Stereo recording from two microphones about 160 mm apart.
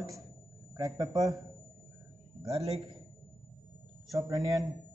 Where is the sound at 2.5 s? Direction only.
40° right (ahead or behind).